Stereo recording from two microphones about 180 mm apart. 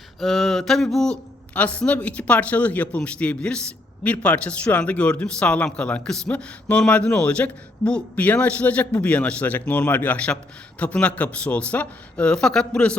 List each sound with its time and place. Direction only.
0.2 s speech: centre (ahead or behind)